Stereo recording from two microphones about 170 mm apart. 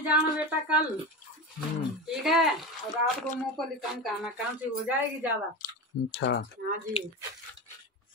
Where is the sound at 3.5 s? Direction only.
Centre (ahead or behind).